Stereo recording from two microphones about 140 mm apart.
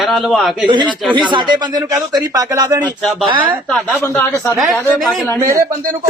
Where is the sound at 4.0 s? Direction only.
10° left (ahead or behind).